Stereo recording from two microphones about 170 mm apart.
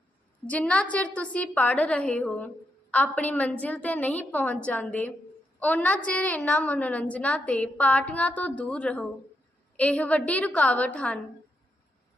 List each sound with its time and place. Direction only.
0.4 s a woman's voice: 10° left (ahead or behind)